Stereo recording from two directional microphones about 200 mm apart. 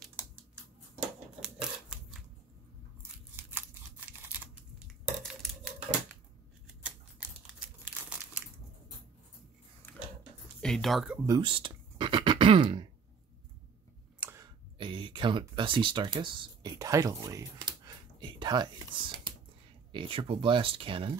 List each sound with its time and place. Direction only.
1.4 s a sound: 5° right (ahead or behind)
6.8 s typing: 5° right (ahead or behind)
7.9 s crumpling: 10° right (ahead or behind)
10.6 s speech: centre (ahead or behind)
11.2 s throat clearing: 20° right (ahead or behind)
14.2 s a sound: 15° right (ahead or behind)
19.9 s speech: 25° right (ahead or behind)